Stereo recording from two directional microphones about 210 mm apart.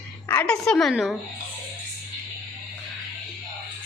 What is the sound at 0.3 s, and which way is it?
Speech, 5° left (ahead or behind).